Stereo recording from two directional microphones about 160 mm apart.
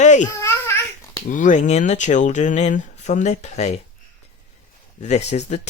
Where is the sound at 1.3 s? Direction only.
55° left (ahead or behind).